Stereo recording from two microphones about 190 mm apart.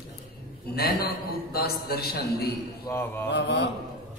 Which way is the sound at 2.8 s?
10° left (ahead or behind).